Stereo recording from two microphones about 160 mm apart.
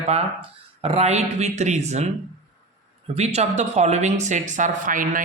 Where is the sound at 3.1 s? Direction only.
45° right (ahead or behind).